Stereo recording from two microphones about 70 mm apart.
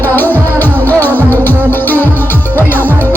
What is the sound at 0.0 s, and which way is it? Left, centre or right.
Music, left.